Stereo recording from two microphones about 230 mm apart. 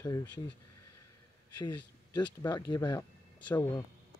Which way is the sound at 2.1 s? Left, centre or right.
Centre.